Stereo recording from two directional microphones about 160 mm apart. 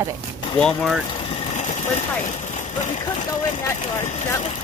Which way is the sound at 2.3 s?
45° left (ahead or behind).